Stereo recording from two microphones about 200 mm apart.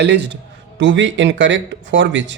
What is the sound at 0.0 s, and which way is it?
Speech, 60° right (ahead or behind).